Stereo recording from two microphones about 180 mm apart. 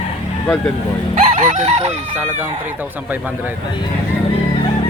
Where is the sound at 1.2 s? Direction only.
40° right (ahead or behind).